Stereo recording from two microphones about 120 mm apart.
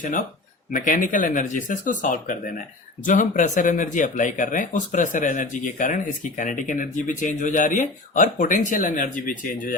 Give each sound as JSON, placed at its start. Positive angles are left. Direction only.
{"t": 0.9, "sound": "speech", "side_deg": 90}